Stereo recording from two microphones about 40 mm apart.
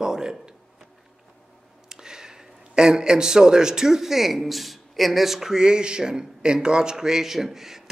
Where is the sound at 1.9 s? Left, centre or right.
Centre.